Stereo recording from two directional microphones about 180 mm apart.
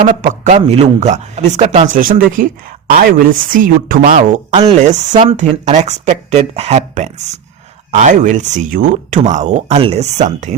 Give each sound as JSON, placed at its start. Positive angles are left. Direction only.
{"t": 0.5, "sound": "speech", "side_deg": -35}
{"t": 4.5, "sound": "speech", "side_deg": -35}